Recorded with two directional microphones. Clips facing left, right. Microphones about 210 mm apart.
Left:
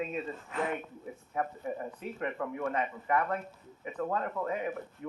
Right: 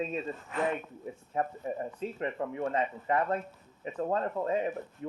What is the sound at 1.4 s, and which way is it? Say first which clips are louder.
A man's voice: right 2 dB; 30° right (ahead or behind).